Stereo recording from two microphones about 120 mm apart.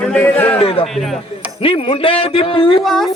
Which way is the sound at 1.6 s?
50° left (ahead or behind).